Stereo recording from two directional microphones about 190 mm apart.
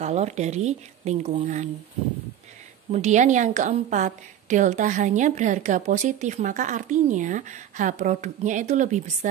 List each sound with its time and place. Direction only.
0.0 s a woman's voice: 35° right (ahead or behind)
2.9 s a woman's voice: 40° right (ahead or behind)